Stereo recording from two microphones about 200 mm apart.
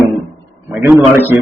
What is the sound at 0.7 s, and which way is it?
Speech, 10° right (ahead or behind).